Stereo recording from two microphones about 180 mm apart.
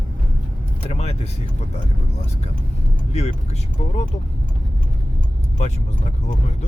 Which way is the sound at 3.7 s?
35° left (ahead or behind).